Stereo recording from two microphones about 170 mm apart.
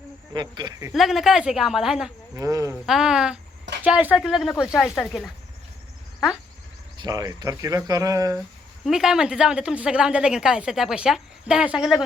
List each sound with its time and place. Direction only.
0.3 s speech: 25° right (ahead or behind)
0.9 s speech: centre (ahead or behind)
2.3 s speech: 20° right (ahead or behind)
2.8 s speech: 5° right (ahead or behind)
6.9 s speech: 25° right (ahead or behind)
8.8 s speech: 5° right (ahead or behind)